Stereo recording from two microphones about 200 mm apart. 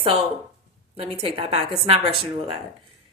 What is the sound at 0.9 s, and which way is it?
Speech, 30° right (ahead or behind).